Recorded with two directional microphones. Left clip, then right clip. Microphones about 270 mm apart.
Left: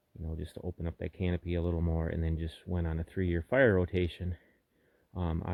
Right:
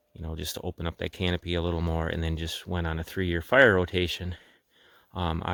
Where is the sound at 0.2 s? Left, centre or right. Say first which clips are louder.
Right 8 dB; centre.